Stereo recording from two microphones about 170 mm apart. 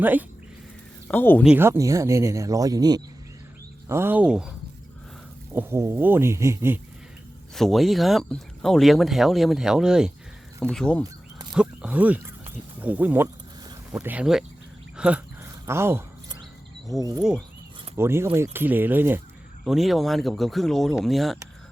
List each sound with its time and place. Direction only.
0.0 s speech: 10° right (ahead or behind)
1.0 s speech: 10° left (ahead or behind)
1.5 s speech: 15° right (ahead or behind)
5.5 s speech: 15° right (ahead or behind)
7.5 s speech: centre (ahead or behind)
11.5 s speech: 5° right (ahead or behind)
15.4 s a sound: 15° right (ahead or behind)
17.0 s cricket: 20° right (ahead or behind)
17.9 s speech: 15° right (ahead or behind)
19.6 s speech: centre (ahead or behind)